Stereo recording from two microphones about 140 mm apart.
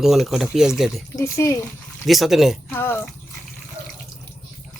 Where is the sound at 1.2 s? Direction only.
20° left (ahead or behind).